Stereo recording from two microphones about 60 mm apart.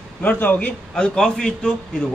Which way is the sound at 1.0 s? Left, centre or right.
Centre.